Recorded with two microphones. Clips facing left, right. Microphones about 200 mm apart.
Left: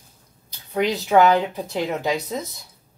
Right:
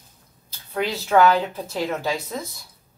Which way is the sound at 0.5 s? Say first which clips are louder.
Left 4 dB; 15° left (ahead or behind).